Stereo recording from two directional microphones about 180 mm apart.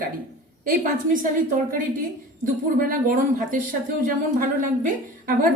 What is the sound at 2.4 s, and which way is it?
Speech, 50° right (ahead or behind).